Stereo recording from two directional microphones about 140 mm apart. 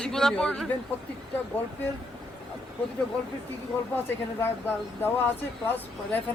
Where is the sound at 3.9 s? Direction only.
15° left (ahead or behind).